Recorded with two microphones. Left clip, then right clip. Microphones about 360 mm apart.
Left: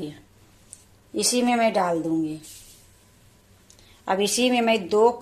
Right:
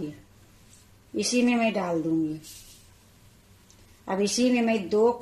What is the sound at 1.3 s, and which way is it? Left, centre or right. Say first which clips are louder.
Speech: left 4 dB; left.